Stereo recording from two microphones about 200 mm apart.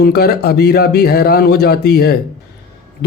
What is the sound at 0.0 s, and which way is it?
Speech, 50° left (ahead or behind).